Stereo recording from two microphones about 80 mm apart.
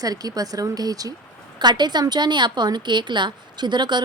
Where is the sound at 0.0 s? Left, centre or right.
Right.